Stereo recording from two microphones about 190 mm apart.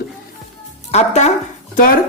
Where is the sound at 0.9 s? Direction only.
35° left (ahead or behind).